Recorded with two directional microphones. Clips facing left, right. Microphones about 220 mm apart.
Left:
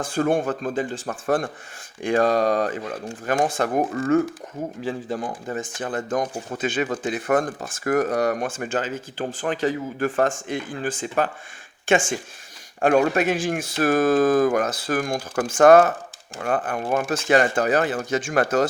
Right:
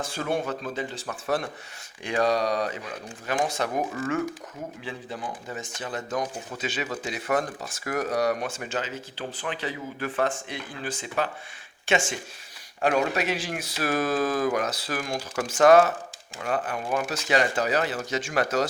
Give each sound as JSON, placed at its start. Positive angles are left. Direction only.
{"t": 0.0, "sound": "speech", "side_deg": 50}